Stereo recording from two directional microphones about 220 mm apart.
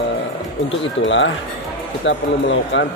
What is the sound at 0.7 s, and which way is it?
Speech, 60° left (ahead or behind).